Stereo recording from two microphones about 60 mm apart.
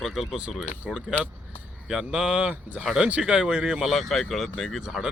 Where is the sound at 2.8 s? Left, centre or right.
Centre.